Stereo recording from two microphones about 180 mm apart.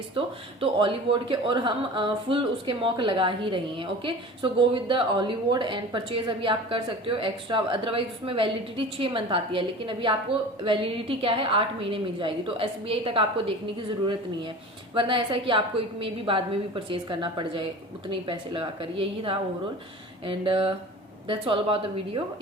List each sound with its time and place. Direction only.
0.6 s a woman's voice: 30° right (ahead or behind)
14.9 s a woman's voice: 25° right (ahead or behind)